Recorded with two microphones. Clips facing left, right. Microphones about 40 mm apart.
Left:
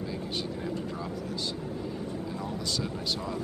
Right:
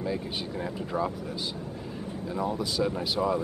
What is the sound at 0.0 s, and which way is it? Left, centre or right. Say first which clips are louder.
Speech: right 2 dB; centre.